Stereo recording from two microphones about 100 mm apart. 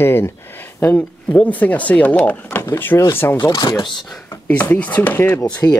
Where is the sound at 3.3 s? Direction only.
45° left (ahead or behind).